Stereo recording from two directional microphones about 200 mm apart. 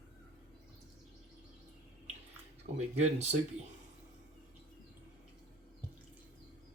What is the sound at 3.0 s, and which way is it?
Speech, 35° right (ahead or behind).